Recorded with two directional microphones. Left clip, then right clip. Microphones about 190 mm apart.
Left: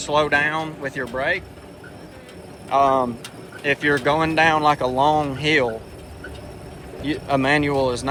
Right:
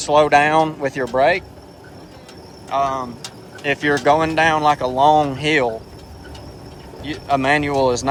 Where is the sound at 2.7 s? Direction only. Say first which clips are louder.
Left 3 dB; 15° left (ahead or behind).